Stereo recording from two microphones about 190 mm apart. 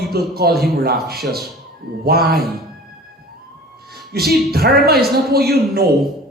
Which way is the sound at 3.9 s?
55° right (ahead or behind).